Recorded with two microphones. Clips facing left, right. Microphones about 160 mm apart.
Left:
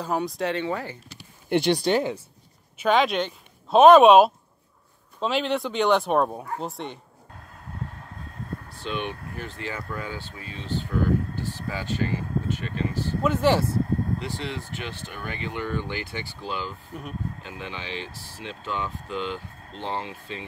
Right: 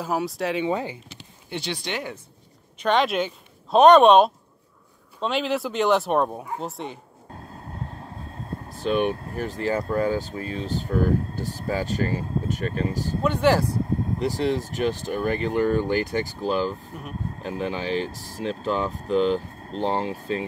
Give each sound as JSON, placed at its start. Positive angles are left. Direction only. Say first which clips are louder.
{"t": 0.0, "sound": "speech", "louder": "right 1 dB", "side_deg": -5}
{"t": 0.7, "sound": "speech", "louder": "right 4 dB", "side_deg": -20}
{"t": 1.5, "sound": "speech", "louder": "left 10 dB", "side_deg": 55}
{"t": 2.8, "sound": "speech", "louder": "even", "side_deg": 0}
{"t": 7.3, "sound": "vehicle", "louder": "right 2 dB", "side_deg": -30}
{"t": 9.2, "sound": "speech", "louder": "right 7 dB", "side_deg": -35}
{"t": 13.2, "sound": "speech", "louder": "right 1 dB", "side_deg": 0}
{"t": 14.2, "sound": "speech", "louder": "right 9 dB", "side_deg": -40}